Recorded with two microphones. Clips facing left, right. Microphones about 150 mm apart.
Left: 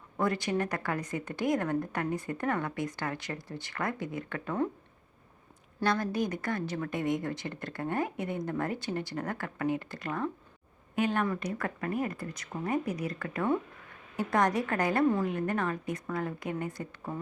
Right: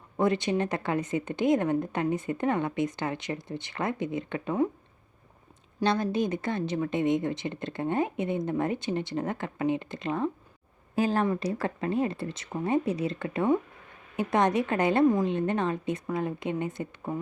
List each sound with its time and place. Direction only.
0.2 s a woman's voice: 20° right (ahead or behind)
5.8 s a woman's voice: 25° right (ahead or behind)
10.9 s a woman's voice: 35° right (ahead or behind)